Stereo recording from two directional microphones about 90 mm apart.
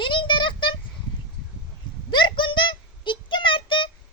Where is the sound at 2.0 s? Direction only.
60° left (ahead or behind).